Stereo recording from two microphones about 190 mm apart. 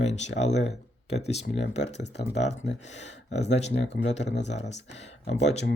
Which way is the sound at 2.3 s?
35° left (ahead or behind).